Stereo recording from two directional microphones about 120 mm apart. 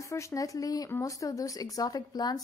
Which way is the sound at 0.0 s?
25° left (ahead or behind).